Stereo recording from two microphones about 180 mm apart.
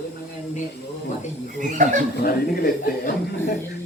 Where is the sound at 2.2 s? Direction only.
55° left (ahead or behind).